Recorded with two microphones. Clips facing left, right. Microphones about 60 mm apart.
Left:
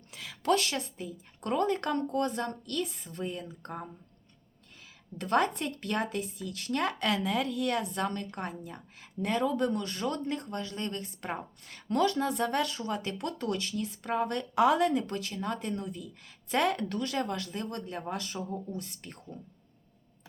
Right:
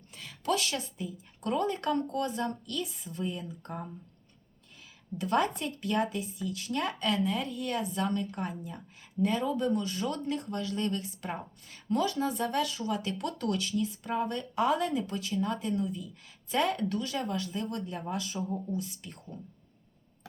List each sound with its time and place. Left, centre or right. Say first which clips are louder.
0.1 s a sound: left 3 dB; left
0.4 s speech: left 3 dB; left
5.1 s speech: left 1 dB; left
11.0 s speech: left 1 dB; left
11.7 s speech: left 2 dB; left